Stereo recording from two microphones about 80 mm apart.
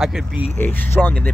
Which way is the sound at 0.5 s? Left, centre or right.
Left.